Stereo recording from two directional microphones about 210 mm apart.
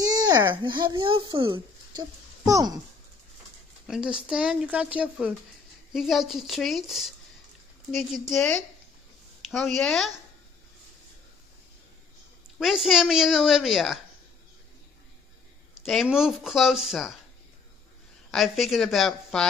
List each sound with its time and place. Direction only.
0.0 s speech: 20° right (ahead or behind)
3.8 s speech: 5° right (ahead or behind)
9.8 s speech: centre (ahead or behind)
12.5 s speech: centre (ahead or behind)
15.7 s speech: centre (ahead or behind)
18.3 s speech: centre (ahead or behind)